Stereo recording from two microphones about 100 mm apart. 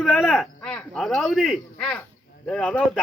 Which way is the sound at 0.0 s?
5° right (ahead or behind).